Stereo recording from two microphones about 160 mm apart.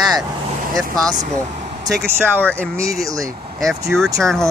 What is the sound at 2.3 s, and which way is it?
Speech, 10° left (ahead or behind).